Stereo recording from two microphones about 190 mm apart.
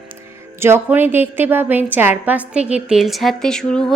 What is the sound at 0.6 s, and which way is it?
A woman's voice, 10° right (ahead or behind).